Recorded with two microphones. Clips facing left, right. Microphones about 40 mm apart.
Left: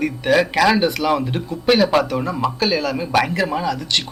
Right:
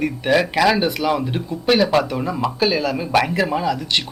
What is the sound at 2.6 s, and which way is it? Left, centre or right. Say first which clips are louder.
Speech: right 2 dB; centre.